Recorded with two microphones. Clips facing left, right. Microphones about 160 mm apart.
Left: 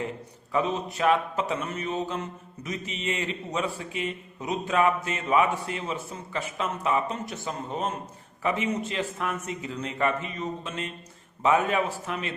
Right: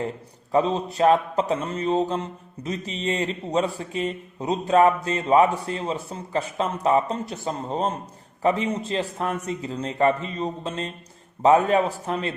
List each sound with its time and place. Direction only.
0.5 s mantra: 35° right (ahead or behind)